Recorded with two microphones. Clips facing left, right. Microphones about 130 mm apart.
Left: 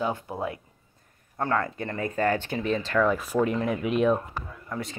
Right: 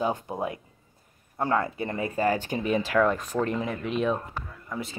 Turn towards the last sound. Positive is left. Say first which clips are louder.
# left 1 dB
turn(degrees=0)  # may be behind; listen again after turning